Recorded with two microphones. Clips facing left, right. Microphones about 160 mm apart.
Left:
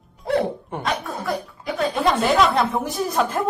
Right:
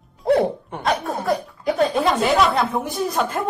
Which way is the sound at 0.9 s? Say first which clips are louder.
Right 5 dB; 40° right (ahead or behind).